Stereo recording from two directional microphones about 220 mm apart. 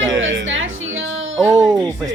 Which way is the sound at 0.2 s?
60° right (ahead or behind).